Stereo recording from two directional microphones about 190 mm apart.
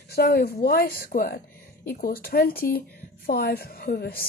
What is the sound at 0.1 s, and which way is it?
A woman's voice, 55° left (ahead or behind).